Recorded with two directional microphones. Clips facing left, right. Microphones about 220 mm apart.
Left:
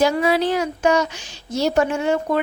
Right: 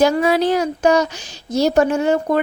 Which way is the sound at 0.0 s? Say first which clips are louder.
Right 3 dB; 45° right (ahead or behind).